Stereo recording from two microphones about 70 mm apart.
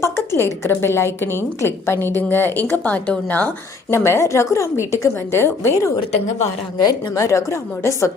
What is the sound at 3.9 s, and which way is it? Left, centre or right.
A woman's voice, left.